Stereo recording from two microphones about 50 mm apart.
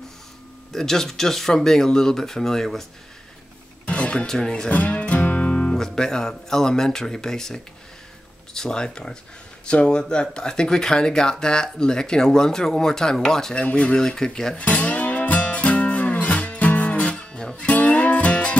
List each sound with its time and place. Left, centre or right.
0.7 s speech: centre
3.8 s music: left
4.3 s speech: centre
4.6 s speech: left
5.2 s music: left
5.5 s guitar: centre
5.8 s speech: centre
13.6 s speech: left
13.9 s speech: centre
14.6 s music: left